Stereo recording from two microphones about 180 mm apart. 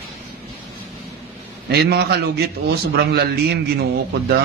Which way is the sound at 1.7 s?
60° right (ahead or behind).